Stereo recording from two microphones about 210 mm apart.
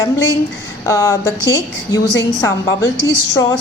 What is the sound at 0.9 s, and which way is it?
A woman's voice, 15° left (ahead or behind).